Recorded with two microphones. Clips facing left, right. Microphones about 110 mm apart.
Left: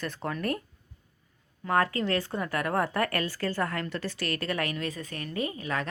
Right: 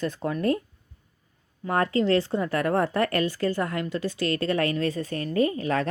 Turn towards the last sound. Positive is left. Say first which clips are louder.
# right 8 dB
turn(degrees=-35)  # may be behind; listen again after turning